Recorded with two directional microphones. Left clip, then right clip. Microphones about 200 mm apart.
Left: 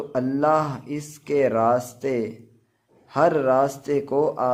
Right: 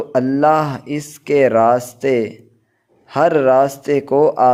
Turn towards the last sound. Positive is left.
turn(degrees=-25)  # may be behind; listen again after turning